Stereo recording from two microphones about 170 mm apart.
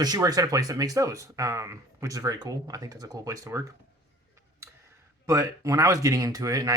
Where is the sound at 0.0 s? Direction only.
20° right (ahead or behind).